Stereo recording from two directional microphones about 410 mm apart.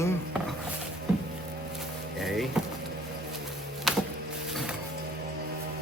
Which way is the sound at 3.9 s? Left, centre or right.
Centre.